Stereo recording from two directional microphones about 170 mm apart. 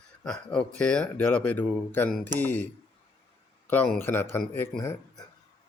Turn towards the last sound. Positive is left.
turn(degrees=15)  # may be behind; listen again after turning